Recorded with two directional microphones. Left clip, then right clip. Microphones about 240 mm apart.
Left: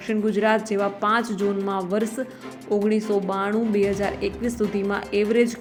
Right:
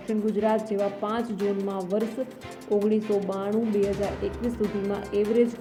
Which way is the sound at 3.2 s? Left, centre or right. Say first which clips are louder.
Left 4 dB; centre.